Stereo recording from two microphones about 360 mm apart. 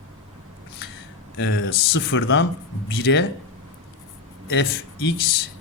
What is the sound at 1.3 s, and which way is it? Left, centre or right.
Speech, left.